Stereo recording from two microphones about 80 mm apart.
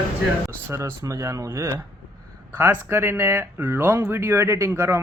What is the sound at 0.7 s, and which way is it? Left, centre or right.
Speech, right.